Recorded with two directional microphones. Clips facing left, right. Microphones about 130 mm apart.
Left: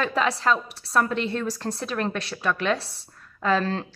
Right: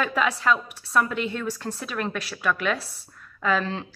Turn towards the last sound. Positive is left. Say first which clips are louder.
# left 2 dB
turn(degrees=35)  # may be behind; listen again after turning